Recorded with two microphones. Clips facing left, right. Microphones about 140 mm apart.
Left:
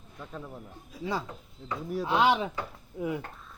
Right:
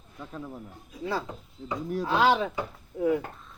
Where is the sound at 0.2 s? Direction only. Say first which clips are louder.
Right 2 dB; centre (ahead or behind).